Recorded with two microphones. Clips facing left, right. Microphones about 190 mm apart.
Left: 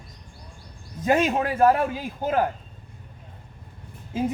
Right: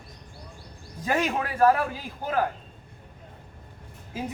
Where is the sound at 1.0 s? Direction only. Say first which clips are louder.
Left 5 dB; 20° left (ahead or behind).